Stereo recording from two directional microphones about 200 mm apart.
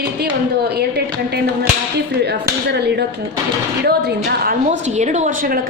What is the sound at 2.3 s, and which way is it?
Speech, 55° right (ahead or behind).